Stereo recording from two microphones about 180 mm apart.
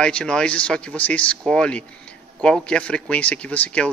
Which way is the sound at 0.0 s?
5° left (ahead or behind).